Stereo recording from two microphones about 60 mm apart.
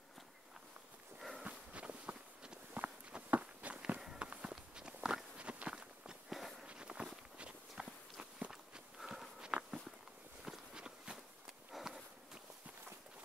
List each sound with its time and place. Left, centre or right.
1.4 s walk: right
6.2 s walk: centre
6.6 s walk: centre
9.4 s walk: centre